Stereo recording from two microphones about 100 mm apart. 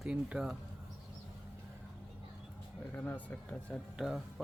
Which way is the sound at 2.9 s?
15° left (ahead or behind).